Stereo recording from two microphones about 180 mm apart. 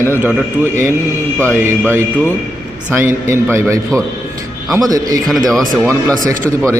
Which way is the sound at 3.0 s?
15° right (ahead or behind).